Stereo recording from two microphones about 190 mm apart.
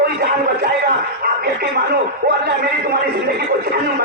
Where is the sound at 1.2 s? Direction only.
50° right (ahead or behind).